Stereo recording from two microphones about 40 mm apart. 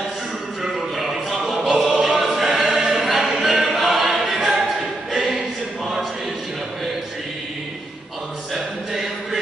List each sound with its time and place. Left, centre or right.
0.7 s music: centre
1.5 s choir: centre
2.2 s choir: centre
2.8 s choir: right
3.1 s choir: centre
3.4 s choir: right
3.7 s choir: centre